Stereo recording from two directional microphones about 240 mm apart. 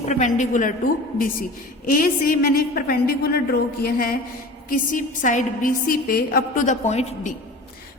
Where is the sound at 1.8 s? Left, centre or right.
Left.